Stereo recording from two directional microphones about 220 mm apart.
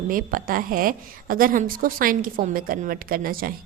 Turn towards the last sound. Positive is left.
turn(degrees=-40)  # may be behind; listen again after turning